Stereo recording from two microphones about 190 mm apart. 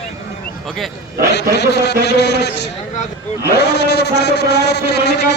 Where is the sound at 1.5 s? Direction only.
65° left (ahead or behind).